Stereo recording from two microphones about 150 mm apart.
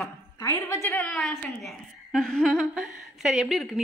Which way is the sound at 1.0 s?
Centre (ahead or behind).